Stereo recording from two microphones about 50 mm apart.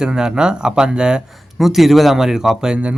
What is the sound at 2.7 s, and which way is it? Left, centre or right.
Speech, right.